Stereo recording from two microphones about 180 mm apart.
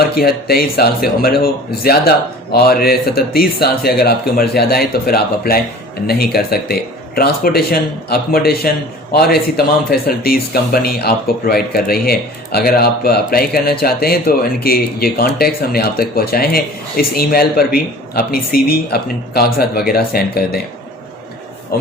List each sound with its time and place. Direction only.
0.2 s speech: 60° left (ahead or behind)